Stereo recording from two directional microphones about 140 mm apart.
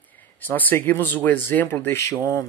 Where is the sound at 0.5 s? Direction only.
15° left (ahead or behind).